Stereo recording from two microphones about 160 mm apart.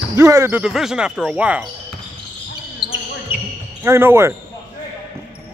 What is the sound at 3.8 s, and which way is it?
Speech, 15° right (ahead or behind).